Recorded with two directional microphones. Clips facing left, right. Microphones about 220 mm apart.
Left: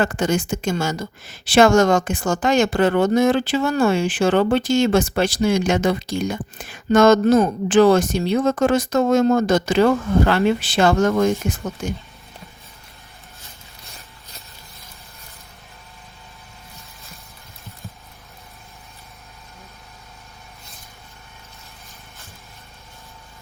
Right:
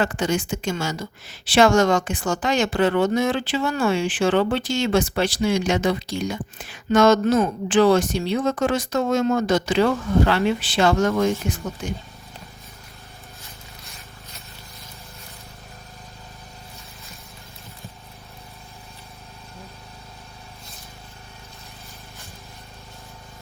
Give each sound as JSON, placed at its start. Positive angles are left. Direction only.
{"t": 0.0, "sound": "a woman's voice", "side_deg": 45}